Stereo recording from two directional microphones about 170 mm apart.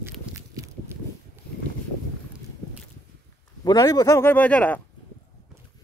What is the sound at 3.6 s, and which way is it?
Speech, 20° left (ahead or behind).